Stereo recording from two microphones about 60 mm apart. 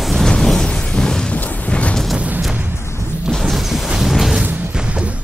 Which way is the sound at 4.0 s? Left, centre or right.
Centre.